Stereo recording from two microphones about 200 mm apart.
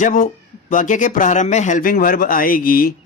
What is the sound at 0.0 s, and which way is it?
A man's voice, 40° left (ahead or behind).